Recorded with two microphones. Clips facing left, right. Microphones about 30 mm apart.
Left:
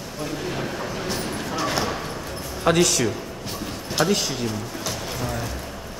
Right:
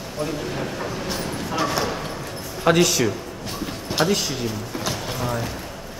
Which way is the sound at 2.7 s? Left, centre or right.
Centre.